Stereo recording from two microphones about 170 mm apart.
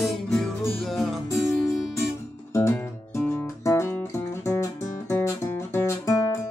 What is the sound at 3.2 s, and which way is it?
Music, 15° left (ahead or behind).